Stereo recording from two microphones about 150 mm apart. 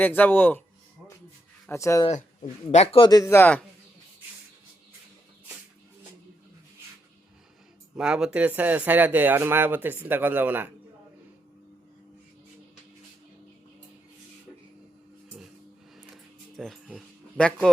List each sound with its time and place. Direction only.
0.0 s speech: 10° left (ahead or behind)
1.7 s speech: 20° left (ahead or behind)
2.0 s a man's voice: 40° left (ahead or behind)
3.1 s speech: 20° left (ahead or behind)
7.9 s speech: 5° right (ahead or behind)
16.6 s speech: centre (ahead or behind)